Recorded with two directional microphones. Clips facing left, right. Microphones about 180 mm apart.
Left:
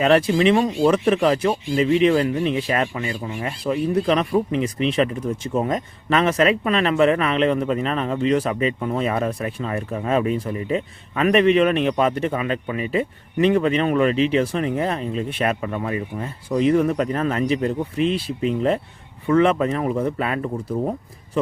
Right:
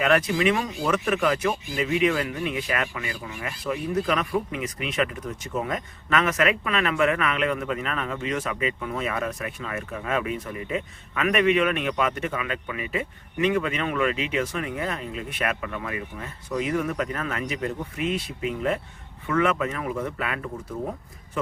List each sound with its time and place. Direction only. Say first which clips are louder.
0.0 s speech: left 5 dB; 30° left (ahead or behind)